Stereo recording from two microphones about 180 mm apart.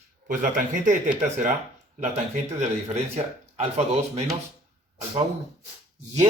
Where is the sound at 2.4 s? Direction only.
40° right (ahead or behind).